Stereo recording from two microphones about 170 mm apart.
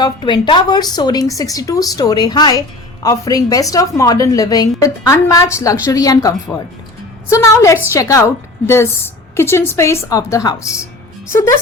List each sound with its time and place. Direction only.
0.0 s a woman's voice: 25° left (ahead or behind)